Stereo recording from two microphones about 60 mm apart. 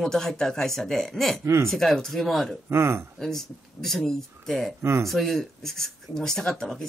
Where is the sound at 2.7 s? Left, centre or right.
Right.